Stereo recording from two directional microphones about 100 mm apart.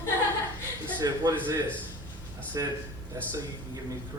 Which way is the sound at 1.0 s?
40° right (ahead or behind).